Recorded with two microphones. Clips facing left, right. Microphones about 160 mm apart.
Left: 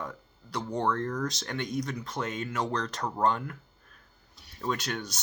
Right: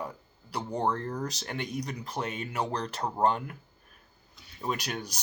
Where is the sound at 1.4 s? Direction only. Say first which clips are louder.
Left 2 dB; 10° right (ahead or behind).